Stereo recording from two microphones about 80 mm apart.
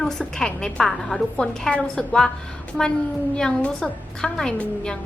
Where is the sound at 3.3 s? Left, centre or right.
Centre.